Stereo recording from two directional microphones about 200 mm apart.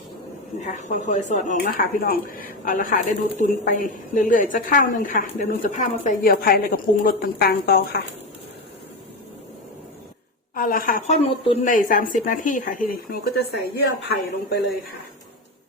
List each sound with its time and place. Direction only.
0.6 s speech: 35° left (ahead or behind)
10.5 s a woman's voice: 45° left (ahead or behind)
11.6 s speech: 40° left (ahead or behind)